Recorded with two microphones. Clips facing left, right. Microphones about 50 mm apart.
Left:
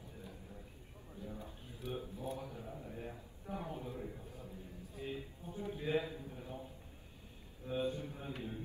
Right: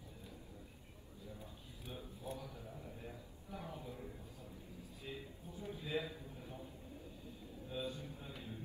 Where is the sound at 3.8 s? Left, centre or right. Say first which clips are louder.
Left 5 dB; left.